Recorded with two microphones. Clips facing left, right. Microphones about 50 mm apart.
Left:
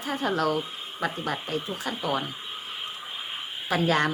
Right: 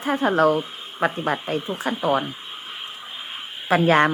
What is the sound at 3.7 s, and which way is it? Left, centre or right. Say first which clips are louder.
Speech: right 7 dB; right.